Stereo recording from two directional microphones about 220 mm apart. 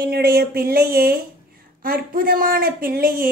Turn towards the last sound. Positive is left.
turn(degrees=-40)  # may be behind; listen again after turning